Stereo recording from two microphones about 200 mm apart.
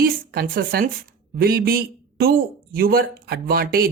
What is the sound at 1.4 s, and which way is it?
A man's voice, 50° right (ahead or behind).